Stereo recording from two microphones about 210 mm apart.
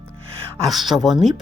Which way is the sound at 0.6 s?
Centre (ahead or behind).